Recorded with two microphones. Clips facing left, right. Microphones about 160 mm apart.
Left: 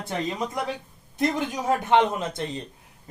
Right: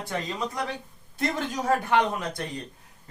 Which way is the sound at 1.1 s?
20° left (ahead or behind).